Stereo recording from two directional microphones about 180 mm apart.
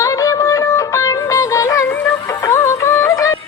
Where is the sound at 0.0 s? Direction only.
15° left (ahead or behind).